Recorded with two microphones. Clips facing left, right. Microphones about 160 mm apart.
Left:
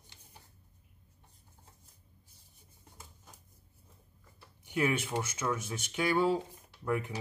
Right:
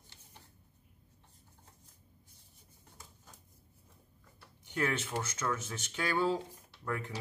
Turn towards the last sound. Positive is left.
turn(degrees=15)  # may be behind; listen again after turning